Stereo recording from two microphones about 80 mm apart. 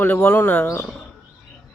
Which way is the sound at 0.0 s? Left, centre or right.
Left.